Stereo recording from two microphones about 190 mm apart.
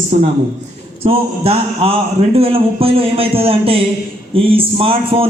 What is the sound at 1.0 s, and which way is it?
Speech, 30° right (ahead or behind).